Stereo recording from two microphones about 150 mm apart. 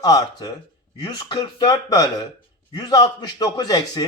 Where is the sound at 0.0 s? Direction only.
25° left (ahead or behind).